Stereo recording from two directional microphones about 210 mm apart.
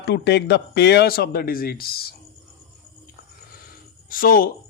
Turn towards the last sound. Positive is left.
turn(degrees=45)  # may be behind; listen again after turning